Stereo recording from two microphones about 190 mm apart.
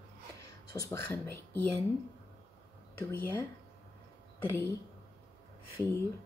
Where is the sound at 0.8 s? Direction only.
15° left (ahead or behind).